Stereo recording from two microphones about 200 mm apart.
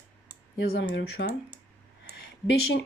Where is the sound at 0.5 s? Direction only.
60° left (ahead or behind).